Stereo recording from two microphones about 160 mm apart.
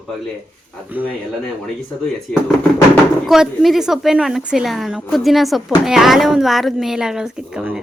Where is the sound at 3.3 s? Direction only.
Centre (ahead or behind).